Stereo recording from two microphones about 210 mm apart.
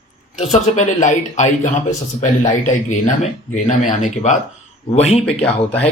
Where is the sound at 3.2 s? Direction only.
35° left (ahead or behind).